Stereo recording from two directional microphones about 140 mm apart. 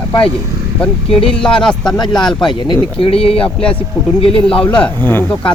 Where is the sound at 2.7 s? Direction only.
40° left (ahead or behind).